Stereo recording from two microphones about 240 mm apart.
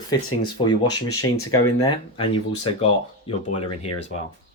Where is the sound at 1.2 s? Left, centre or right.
Left.